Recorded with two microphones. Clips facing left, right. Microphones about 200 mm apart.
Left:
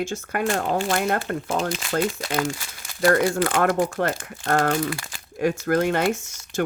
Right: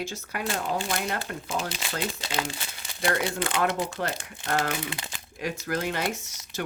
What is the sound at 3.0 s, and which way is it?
Speech, 50° left (ahead or behind).